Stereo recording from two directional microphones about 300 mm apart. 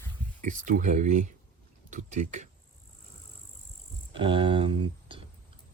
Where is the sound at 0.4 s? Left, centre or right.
Right.